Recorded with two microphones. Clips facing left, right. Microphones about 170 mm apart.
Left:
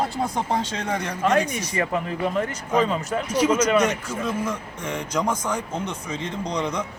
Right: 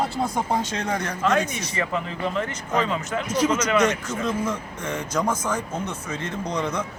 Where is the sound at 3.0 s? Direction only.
35° left (ahead or behind).